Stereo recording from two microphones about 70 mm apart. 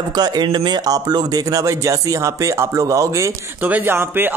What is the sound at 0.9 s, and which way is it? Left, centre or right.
Speech, right.